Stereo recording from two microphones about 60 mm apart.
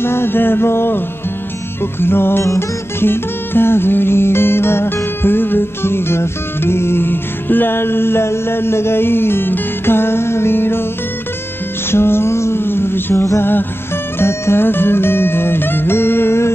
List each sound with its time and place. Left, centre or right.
0.0 s music: left
2.4 s music: left
3.1 s music: left
11.9 s a sound: left
14.2 s music: left